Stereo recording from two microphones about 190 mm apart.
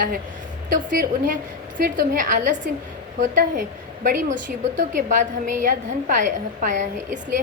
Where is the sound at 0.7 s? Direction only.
45° right (ahead or behind).